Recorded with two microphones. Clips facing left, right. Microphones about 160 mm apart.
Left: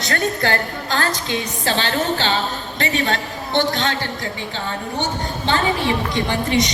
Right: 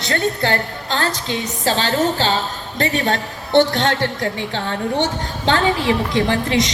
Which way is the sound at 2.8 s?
45° right (ahead or behind).